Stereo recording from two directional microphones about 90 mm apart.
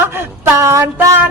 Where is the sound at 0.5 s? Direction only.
30° right (ahead or behind).